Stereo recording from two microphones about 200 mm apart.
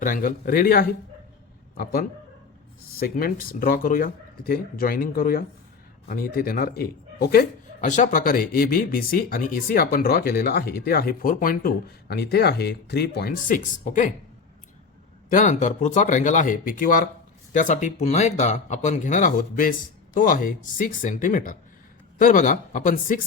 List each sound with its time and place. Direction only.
0.0 s speech: 40° left (ahead or behind)
15.3 s speech: 40° left (ahead or behind)